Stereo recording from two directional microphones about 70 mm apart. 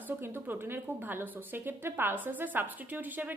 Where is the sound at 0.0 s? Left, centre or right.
Right.